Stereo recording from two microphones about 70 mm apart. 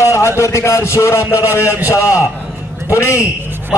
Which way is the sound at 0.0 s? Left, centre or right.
Left.